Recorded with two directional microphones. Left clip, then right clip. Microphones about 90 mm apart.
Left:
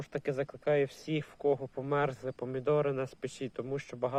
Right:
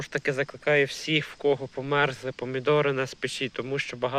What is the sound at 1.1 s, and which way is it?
Speech, 10° left (ahead or behind).